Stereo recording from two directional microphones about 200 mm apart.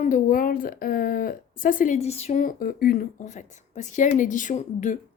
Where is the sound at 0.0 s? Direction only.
40° left (ahead or behind).